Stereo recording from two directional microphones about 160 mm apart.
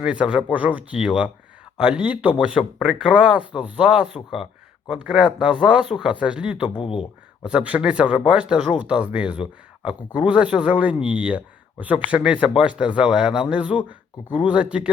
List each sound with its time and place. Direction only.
0.0 s speech: 5° right (ahead or behind)
6.7 s speech: 35° left (ahead or behind)
7.4 s speech: 10° right (ahead or behind)